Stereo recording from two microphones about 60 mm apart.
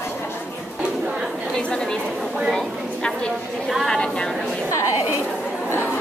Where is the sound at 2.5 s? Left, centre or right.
Centre.